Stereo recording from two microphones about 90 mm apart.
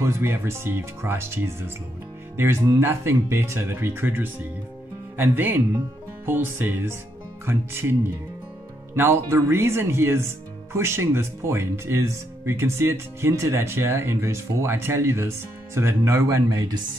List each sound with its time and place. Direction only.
0.0 s speech: 30° right (ahead or behind)
8.9 s speech: 25° right (ahead or behind); by 16.7 s 40° right (ahead or behind)